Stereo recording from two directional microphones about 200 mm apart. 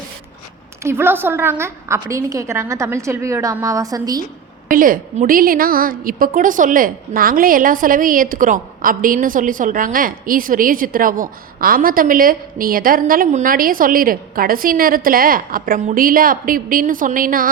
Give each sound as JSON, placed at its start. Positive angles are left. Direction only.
{"t": 0.8, "sound": "a woman's voice", "side_deg": -10}
{"t": 4.7, "sound": "a woman's voice", "side_deg": -45}